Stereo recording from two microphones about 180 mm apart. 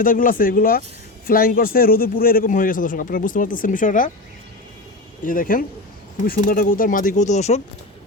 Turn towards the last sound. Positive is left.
turn(degrees=40)  # may be behind; listen again after turning